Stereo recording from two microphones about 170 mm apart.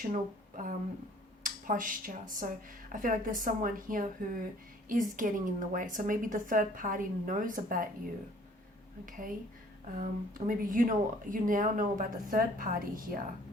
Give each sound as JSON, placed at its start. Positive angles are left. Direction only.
{"t": 0.1, "sound": "speech", "side_deg": -50}
{"t": 9.0, "sound": "speech", "side_deg": -55}